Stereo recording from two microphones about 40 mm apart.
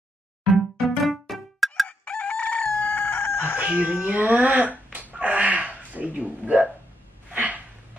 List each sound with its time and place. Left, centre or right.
0.5 s music: centre
1.9 s crowing: left
2.8 s chicken: left
3.5 s chicken: right
4.0 s speech: right
5.1 s a sound: right